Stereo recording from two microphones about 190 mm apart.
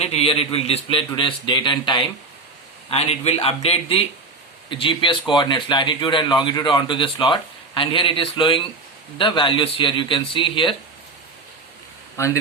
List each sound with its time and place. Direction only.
0.0 s a man's voice: 30° left (ahead or behind)
12.1 s speech: 15° left (ahead or behind)